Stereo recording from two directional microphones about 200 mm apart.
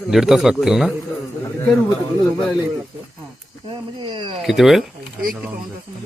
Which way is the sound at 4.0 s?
25° right (ahead or behind).